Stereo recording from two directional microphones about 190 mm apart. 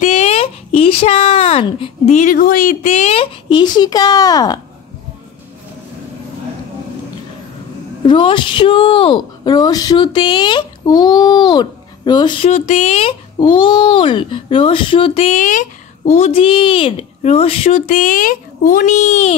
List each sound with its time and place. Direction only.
0.0 s speech: 35° left (ahead or behind); by 4.6 s 20° left (ahead or behind)
8.0 s a woman's voice: 25° left (ahead or behind)
17.8 s speech: 45° left (ahead or behind)